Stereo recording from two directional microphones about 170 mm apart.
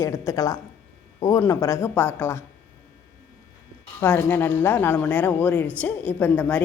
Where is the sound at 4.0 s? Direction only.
10° left (ahead or behind).